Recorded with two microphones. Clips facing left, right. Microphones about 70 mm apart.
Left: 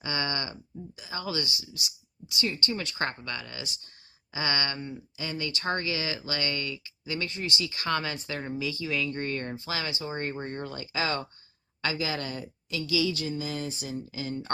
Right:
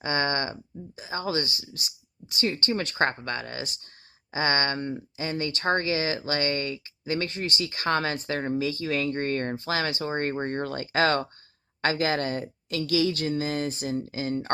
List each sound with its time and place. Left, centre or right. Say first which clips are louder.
0.0 s speech: right 6 dB; right
4.8 s speech: right 6 dB; right
5.1 s a woman's voice: right 2 dB; right